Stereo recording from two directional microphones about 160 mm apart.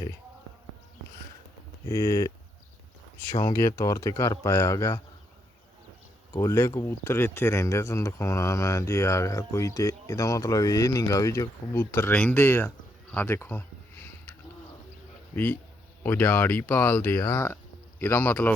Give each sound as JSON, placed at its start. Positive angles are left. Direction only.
{"t": 1.9, "sound": "speech", "side_deg": 20}
{"t": 3.4, "sound": "speech", "side_deg": 20}
{"t": 6.3, "sound": "speech", "side_deg": 20}
{"t": 15.3, "sound": "speech", "side_deg": 10}